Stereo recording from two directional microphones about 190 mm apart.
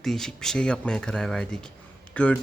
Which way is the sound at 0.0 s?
Centre (ahead or behind).